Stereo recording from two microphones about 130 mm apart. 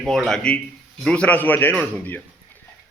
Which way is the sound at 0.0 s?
5° left (ahead or behind).